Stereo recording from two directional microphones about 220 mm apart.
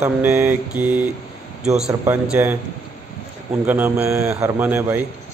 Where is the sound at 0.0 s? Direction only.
10° right (ahead or behind).